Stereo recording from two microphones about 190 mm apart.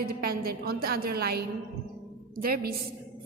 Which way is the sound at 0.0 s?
50° right (ahead or behind).